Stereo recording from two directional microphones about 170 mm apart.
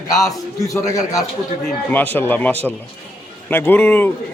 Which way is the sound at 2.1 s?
10° left (ahead or behind).